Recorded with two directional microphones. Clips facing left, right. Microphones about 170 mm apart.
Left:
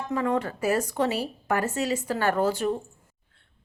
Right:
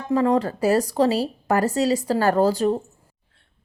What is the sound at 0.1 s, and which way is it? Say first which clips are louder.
Speech: right 7 dB; 35° right (ahead or behind).